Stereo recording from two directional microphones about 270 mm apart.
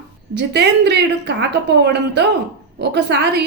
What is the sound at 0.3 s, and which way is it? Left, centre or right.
A woman's voice, right.